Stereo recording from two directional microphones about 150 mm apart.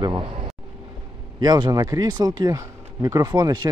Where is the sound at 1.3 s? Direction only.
30° right (ahead or behind).